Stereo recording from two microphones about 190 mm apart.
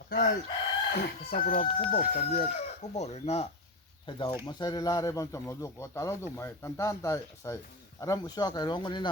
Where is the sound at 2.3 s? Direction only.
35° left (ahead or behind).